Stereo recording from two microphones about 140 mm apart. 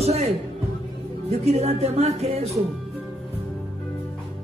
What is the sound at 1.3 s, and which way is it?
Speech, 50° right (ahead or behind).